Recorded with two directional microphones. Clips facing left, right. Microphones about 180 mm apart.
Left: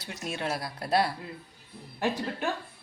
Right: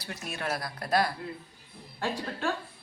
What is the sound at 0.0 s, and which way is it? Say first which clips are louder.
A woman's voice: left 2 dB; 25° left (ahead or behind).